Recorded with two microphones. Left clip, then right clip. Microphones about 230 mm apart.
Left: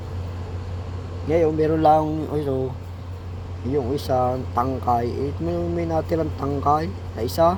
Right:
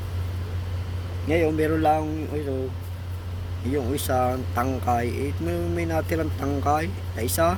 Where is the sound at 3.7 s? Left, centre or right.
Centre.